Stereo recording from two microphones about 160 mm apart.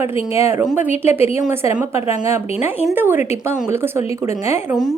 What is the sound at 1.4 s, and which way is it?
Speech, 20° right (ahead or behind).